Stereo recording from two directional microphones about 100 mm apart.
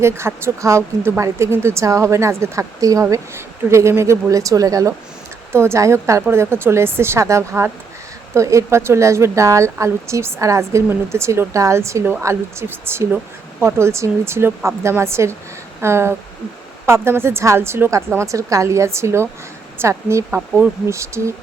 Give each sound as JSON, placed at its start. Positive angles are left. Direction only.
{"t": 0.0, "sound": "speech", "side_deg": -25}